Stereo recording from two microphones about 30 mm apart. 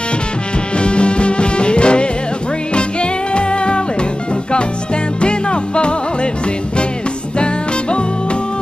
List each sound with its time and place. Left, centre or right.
0.7 s music: left
5.2 s music: left